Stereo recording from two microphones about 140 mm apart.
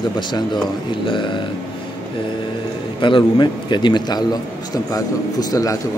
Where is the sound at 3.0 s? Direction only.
35° left (ahead or behind).